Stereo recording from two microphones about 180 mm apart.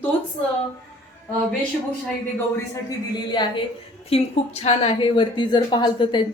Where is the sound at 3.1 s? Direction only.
25° left (ahead or behind).